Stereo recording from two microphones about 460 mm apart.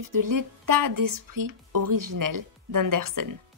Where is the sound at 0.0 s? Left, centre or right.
Right.